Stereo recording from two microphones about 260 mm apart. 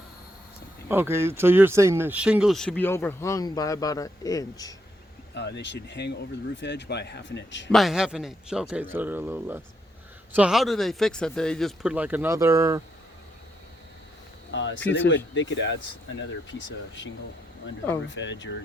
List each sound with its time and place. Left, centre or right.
0.9 s speech: centre
5.3 s speech: left
7.7 s speech: centre
14.5 s speech: left
18.1 s speech: left